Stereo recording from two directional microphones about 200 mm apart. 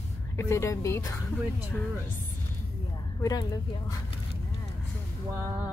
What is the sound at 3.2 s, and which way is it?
Speech, 20° left (ahead or behind).